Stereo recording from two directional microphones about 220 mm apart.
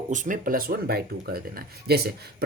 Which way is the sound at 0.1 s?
35° right (ahead or behind).